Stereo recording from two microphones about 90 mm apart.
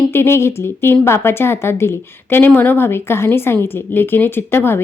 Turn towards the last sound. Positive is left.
turn(degrees=25)  # may be behind; listen again after turning